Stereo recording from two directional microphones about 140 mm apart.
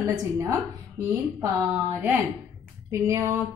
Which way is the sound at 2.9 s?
20° right (ahead or behind).